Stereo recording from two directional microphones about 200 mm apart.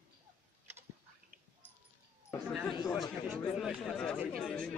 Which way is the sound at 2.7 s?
20° left (ahead or behind).